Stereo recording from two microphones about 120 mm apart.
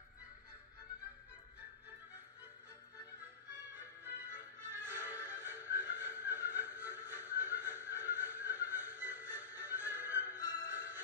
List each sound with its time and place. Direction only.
3.7 s music: 15° right (ahead or behind)